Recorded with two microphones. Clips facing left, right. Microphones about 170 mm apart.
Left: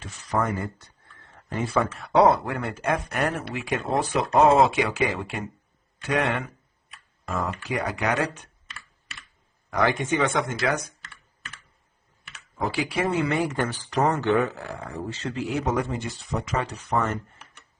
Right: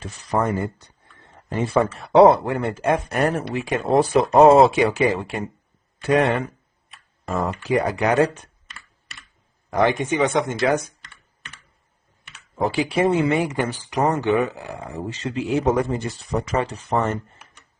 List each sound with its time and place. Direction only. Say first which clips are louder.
0.0 s speech: right 4 dB; 30° right (ahead or behind)
1.5 s speech: right 5 dB; 30° right (ahead or behind)
7.4 s speech: right 9 dB; 35° right (ahead or behind)
9.6 s speech: right 4 dB; 25° right (ahead or behind)
12.5 s speech: right 6 dB; 30° right (ahead or behind)
15.7 s speech: right 5 dB; 40° right (ahead or behind)